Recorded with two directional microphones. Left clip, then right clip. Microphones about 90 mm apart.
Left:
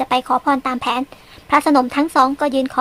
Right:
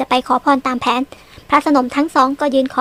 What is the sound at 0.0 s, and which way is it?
Speech, 30° right (ahead or behind).